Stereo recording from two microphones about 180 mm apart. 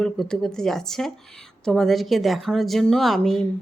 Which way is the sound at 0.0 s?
5° left (ahead or behind).